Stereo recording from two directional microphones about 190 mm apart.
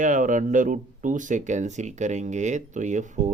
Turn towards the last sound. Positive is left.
turn(degrees=-40)  # may be behind; listen again after turning